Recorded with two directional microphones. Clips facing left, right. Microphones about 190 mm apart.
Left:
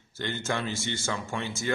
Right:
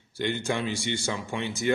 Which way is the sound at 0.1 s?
15° right (ahead or behind).